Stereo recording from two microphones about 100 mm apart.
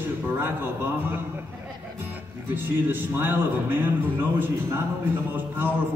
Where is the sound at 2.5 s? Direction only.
20° right (ahead or behind).